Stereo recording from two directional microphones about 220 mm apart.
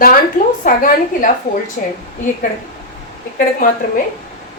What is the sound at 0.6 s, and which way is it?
A woman's voice, 40° left (ahead or behind).